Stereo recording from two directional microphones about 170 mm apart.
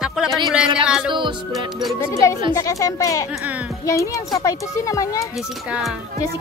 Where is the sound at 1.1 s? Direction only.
25° right (ahead or behind).